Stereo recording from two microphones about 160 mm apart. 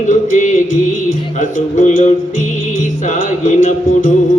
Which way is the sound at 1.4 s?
50° left (ahead or behind).